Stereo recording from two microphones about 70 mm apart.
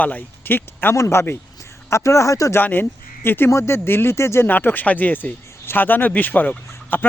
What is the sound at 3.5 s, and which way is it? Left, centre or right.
Speech, left.